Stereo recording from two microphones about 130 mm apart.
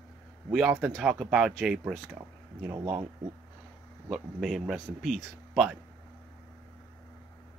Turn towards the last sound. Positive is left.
turn(degrees=0)  # may be behind; listen again after turning